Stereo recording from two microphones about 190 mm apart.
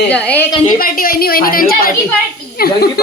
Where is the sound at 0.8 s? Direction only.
50° left (ahead or behind).